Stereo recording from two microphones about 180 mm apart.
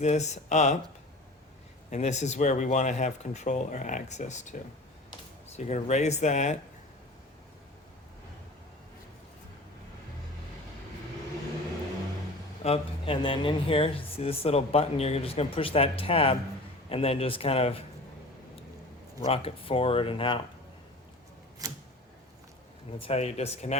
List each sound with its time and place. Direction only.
0.0 s speech: 40° left (ahead or behind)
1.9 s speech: 40° left (ahead or behind)
5.5 s speech: 40° left (ahead or behind)
12.6 s speech: 30° left (ahead or behind)
19.2 s speech: 35° left (ahead or behind)
23.0 s speech: 35° left (ahead or behind)